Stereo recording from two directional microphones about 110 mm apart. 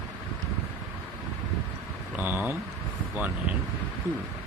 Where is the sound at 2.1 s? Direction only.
15° right (ahead or behind).